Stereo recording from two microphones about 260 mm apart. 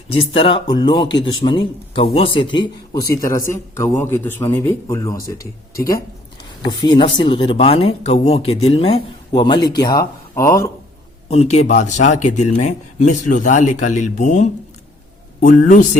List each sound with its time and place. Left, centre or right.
0.1 s speech: centre
6.7 s speech: centre
11.3 s speech: left